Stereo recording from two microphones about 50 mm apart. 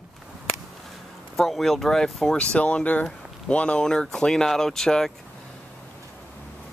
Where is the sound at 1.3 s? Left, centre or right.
Centre.